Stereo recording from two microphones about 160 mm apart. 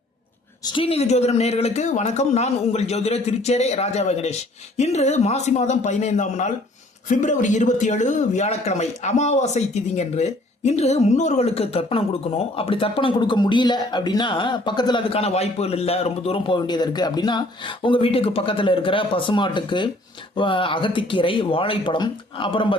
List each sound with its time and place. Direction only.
0.6 s speech: 30° left (ahead or behind)